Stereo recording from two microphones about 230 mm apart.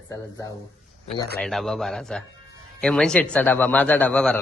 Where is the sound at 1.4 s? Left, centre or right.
Centre.